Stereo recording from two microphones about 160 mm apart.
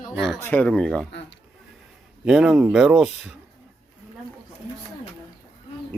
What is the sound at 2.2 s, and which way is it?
Speech, 5° right (ahead or behind).